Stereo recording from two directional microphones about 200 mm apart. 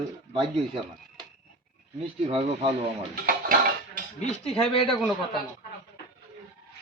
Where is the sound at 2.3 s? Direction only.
30° right (ahead or behind).